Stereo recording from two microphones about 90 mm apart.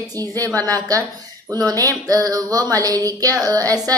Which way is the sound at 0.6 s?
45° right (ahead or behind).